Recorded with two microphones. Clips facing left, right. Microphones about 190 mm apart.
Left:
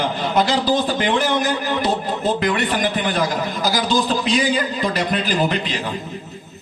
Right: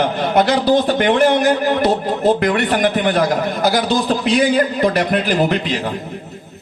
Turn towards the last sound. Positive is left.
turn(degrees=-60)  # may be behind; listen again after turning